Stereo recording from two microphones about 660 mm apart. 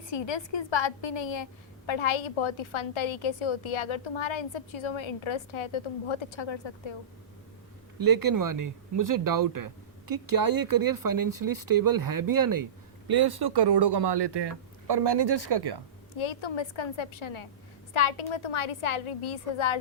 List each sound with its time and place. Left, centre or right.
0.1 s a woman's voice: left
7.9 s speech: right
16.1 s a woman's voice: left